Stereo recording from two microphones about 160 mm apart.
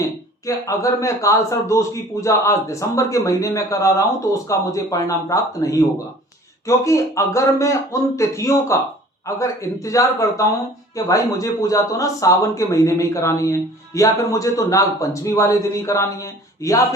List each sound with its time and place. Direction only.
0.0 s speech: 20° left (ahead or behind)